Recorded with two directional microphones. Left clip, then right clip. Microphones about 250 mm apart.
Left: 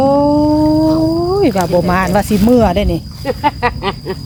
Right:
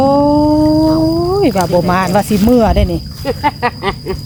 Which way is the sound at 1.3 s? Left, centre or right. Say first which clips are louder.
Even; centre.